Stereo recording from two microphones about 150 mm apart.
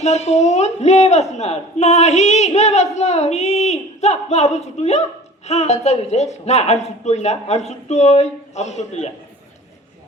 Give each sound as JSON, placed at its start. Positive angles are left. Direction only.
{"t": 0.0, "sound": "a man's voice", "side_deg": 50}